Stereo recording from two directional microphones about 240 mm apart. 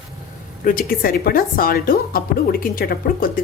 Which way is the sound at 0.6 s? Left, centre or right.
Left.